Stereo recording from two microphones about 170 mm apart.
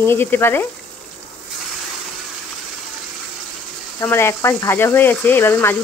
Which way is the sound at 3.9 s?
15° left (ahead or behind).